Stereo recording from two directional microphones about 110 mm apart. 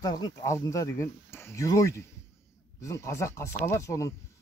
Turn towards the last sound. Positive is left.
turn(degrees=30)  # may be behind; listen again after turning